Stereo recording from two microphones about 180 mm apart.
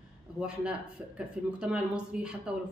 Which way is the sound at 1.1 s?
5° right (ahead or behind).